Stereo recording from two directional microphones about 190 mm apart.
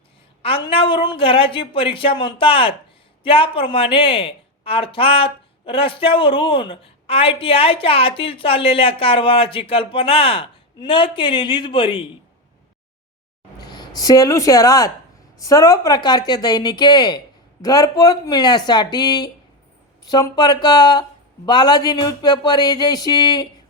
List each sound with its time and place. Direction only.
0.4 s a woman's voice: 30° left (ahead or behind)
13.6 s a woman's voice: 20° left (ahead or behind)